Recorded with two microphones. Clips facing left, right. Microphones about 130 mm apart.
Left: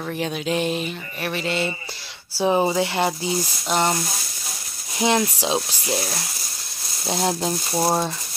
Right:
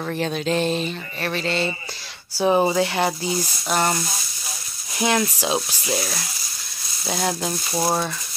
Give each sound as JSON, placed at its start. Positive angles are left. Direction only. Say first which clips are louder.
{"t": 0.0, "sound": "a sound", "louder": "right 2 dB", "side_deg": 10}
{"t": 2.4, "sound": "speech", "louder": "right 1 dB", "side_deg": -10}
{"t": 2.7, "sound": "speech", "louder": "right 1 dB", "side_deg": 15}
{"t": 4.9, "sound": "speech", "louder": "left 1 dB", "side_deg": 20}
{"t": 5.9, "sound": "a sound", "louder": "right 2 dB", "side_deg": 15}
{"t": 7.1, "sound": "speech", "louder": "left 2 dB", "side_deg": 20}